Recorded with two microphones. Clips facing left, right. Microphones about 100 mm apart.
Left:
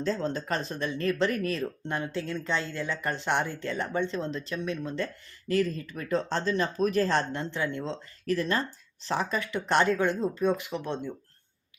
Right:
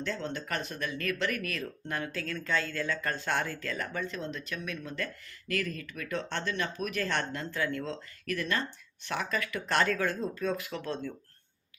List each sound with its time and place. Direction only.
0.0 s speech: 35° left (ahead or behind)